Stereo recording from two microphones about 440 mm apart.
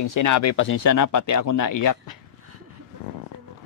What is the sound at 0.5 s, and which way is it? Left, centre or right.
Speech, left.